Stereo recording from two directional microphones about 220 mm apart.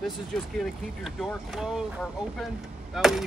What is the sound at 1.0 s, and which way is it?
Speech, centre (ahead or behind).